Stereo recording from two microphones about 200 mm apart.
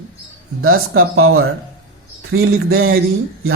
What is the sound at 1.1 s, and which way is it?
A man's voice, 90° right.